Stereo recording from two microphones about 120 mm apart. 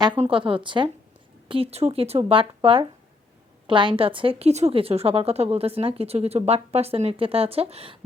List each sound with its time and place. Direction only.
0.2 s a woman's voice: 50° right (ahead or behind)